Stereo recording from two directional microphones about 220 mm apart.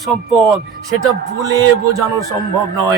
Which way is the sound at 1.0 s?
15° right (ahead or behind).